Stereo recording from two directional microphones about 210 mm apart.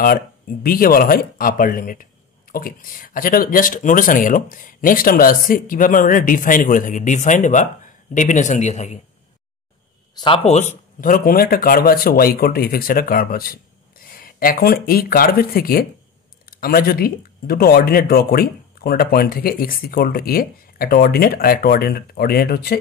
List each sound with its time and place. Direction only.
0.0 s speech: 45° left (ahead or behind)
10.1 s speech: 25° left (ahead or behind); by 22.8 s 50° left (ahead or behind)